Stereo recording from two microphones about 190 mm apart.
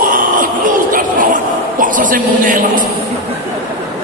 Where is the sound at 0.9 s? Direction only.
45° right (ahead or behind).